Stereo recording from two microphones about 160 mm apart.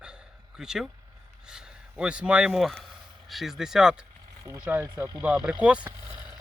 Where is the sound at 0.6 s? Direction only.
5° right (ahead or behind).